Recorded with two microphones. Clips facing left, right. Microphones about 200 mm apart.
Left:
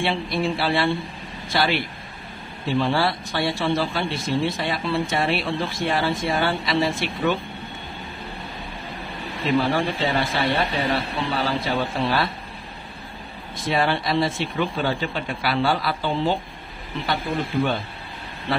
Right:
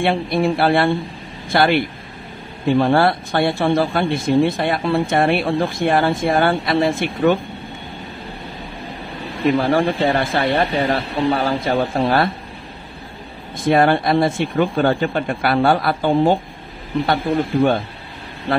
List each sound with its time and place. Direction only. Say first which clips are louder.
0.0 s speech: right 6 dB; 55° right (ahead or behind)
9.6 s speech: right 3 dB; 50° right (ahead or behind)
13.7 s speech: right 8 dB; 50° right (ahead or behind)